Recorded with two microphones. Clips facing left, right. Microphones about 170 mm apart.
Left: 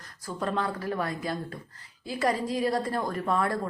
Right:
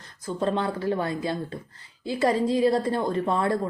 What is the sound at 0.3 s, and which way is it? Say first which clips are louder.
Speech: right 4 dB; 25° right (ahead or behind).